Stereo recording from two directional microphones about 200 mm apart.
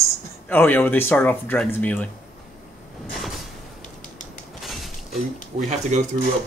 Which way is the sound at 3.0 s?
Centre (ahead or behind).